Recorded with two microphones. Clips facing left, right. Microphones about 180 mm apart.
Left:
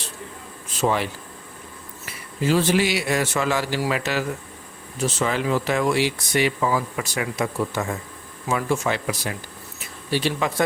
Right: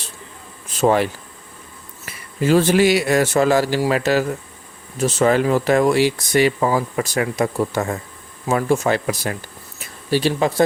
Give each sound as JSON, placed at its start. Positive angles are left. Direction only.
{"t": 0.8, "sound": "speech", "side_deg": -45}
{"t": 2.0, "sound": "speech", "side_deg": -50}